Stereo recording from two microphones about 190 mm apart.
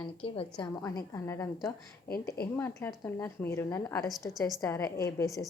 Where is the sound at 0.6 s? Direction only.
20° left (ahead or behind).